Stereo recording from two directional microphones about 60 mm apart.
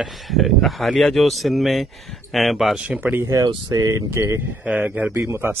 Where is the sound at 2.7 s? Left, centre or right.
Centre.